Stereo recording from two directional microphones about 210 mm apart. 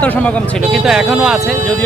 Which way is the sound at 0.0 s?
5° left (ahead or behind).